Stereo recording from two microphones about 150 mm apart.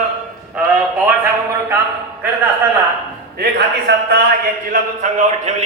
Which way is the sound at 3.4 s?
90° right.